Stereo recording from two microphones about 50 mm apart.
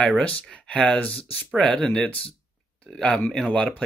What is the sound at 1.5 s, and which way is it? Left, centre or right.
Speech, centre.